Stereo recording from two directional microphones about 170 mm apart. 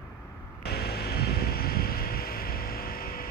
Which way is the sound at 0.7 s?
70° left (ahead or behind).